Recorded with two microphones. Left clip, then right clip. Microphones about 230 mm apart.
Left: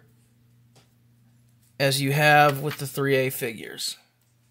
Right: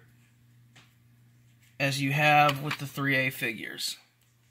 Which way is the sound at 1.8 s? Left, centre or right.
Left.